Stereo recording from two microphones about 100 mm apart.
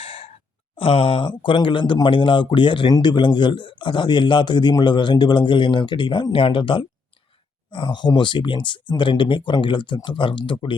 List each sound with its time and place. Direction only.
0.0 s sigh: 70° left (ahead or behind)
0.8 s speech: 65° left (ahead or behind)
1.3 s speech: 55° left (ahead or behind)